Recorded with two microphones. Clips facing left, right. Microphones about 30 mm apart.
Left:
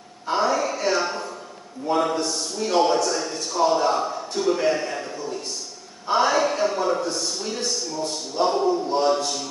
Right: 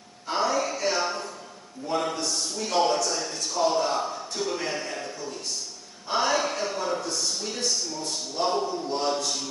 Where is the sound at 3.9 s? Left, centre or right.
Centre.